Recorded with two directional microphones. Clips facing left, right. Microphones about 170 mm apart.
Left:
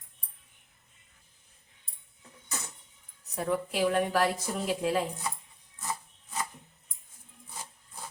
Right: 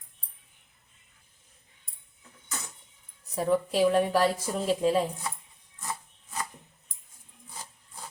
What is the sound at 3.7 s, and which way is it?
A woman's voice, 30° right (ahead or behind).